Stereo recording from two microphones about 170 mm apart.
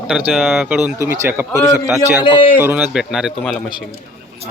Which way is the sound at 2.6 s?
15° right (ahead or behind).